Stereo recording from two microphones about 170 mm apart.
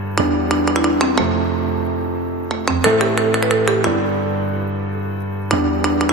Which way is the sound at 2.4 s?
Centre (ahead or behind).